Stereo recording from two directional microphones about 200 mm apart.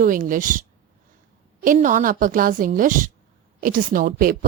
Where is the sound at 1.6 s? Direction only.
40° right (ahead or behind).